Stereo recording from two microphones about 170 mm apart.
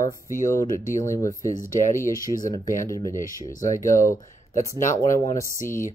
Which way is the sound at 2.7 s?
15° left (ahead or behind).